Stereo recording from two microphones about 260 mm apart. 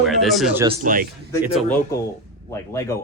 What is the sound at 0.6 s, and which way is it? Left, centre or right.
Speech, right.